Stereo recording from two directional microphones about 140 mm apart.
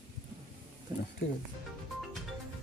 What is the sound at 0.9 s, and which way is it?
Speech, 25° right (ahead or behind).